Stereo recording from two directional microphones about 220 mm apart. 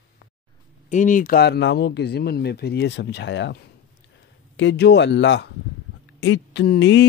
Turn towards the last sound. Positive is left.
turn(degrees=55)  # may be behind; listen again after turning